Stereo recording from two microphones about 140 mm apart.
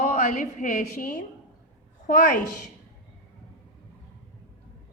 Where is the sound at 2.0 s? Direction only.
70° left (ahead or behind).